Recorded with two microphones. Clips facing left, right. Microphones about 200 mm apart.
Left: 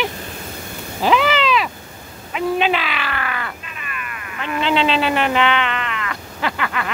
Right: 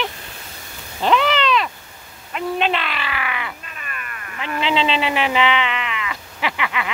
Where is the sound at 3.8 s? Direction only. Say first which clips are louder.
Left 3 dB; 40° right (ahead or behind).